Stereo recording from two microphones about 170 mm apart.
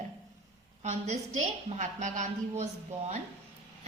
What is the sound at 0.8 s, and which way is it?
A woman's voice, 40° right (ahead or behind).